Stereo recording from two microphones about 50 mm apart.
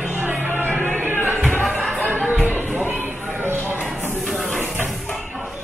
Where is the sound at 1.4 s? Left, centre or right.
Left.